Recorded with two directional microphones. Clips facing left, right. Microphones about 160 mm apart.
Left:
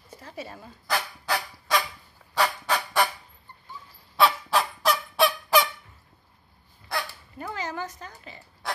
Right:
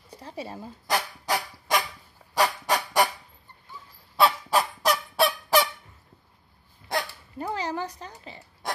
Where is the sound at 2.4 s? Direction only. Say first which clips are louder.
Right 1 dB; 15° right (ahead or behind).